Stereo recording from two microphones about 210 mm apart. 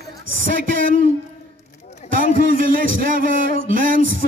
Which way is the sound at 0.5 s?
40° right (ahead or behind).